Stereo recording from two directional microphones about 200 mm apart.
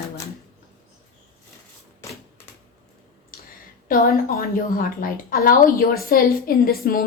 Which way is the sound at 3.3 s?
45° left (ahead or behind).